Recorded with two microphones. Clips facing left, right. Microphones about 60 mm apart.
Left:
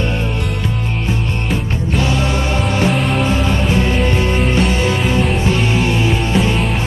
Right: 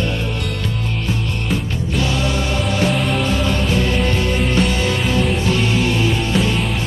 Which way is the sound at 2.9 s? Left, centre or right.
Centre.